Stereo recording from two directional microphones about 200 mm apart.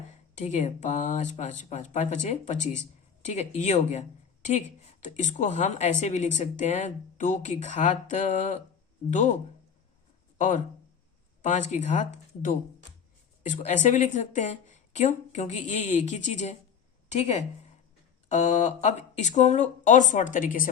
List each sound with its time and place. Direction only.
0.3 s speech: 35° left (ahead or behind)
5.0 s speech: 35° left (ahead or behind)